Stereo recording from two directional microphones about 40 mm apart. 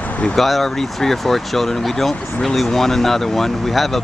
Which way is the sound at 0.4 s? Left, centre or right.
Centre.